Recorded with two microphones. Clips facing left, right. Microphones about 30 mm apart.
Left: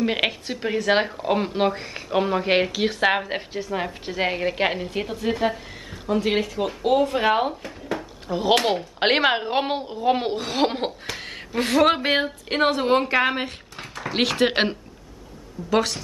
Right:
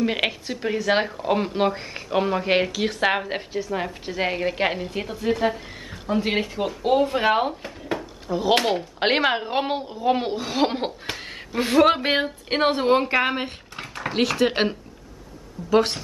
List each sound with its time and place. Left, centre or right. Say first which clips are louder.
0.0 s speech: even; centre
6.0 s speech: left 1 dB; centre
8.0 s a sound: even; centre
9.0 s speech: left 2 dB; centre
14.1 s speech: left 1 dB; centre